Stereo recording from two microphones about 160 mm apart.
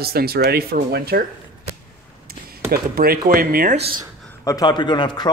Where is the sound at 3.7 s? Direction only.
40° right (ahead or behind).